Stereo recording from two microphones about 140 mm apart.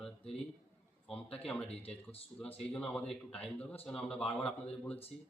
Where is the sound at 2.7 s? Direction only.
5° left (ahead or behind).